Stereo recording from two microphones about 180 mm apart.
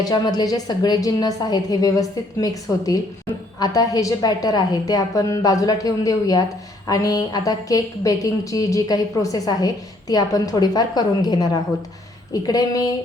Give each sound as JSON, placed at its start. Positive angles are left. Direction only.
{"t": 0.0, "sound": "a woman's voice", "side_deg": 20}